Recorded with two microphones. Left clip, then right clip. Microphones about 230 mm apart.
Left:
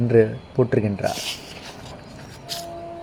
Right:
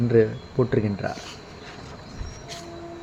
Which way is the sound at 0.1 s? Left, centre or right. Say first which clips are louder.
Left 3 dB; left.